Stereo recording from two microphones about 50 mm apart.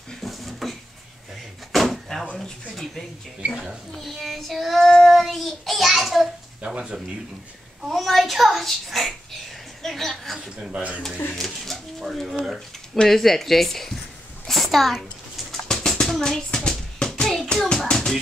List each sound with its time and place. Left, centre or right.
0.2 s a sound: centre
2.7 s speech: centre
3.9 s child singing: centre
6.6 s speech: centre
7.8 s a child's voice: centre
9.8 s a sound: centre
10.7 s speech: right
11.3 s speech: centre
12.3 s speech: centre
12.9 s a child's voice: centre
14.4 s a sound: centre
15.7 s music: centre
17.2 s hands: centre
17.8 s music: centre